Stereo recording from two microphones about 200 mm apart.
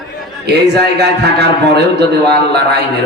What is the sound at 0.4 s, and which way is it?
A man's voice, 55° right (ahead or behind).